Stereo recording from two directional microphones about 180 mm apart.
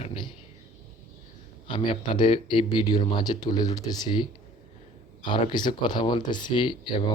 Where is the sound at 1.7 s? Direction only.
25° left (ahead or behind).